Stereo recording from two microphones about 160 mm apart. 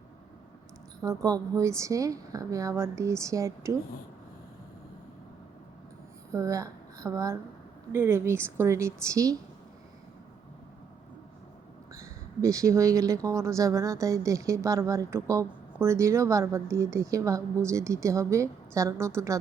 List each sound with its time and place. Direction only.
1.0 s a woman's voice: 20° right (ahead or behind)
6.3 s a woman's voice: 20° right (ahead or behind)
12.4 s a woman's voice: 20° right (ahead or behind)